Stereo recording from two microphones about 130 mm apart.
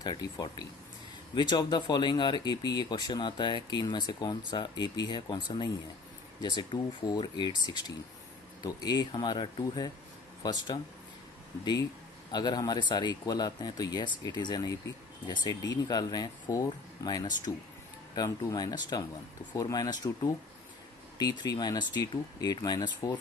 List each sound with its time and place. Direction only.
0.0 s speech: 30° left (ahead or behind)